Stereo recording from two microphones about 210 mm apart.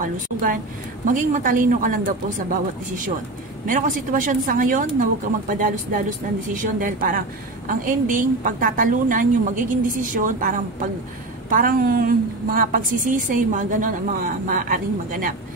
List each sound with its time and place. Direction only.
0.0 s a woman's voice: 40° right (ahead or behind)
3.6 s a woman's voice: 40° right (ahead or behind)